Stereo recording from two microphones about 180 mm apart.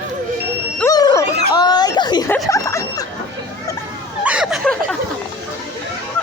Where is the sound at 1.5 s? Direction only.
20° left (ahead or behind).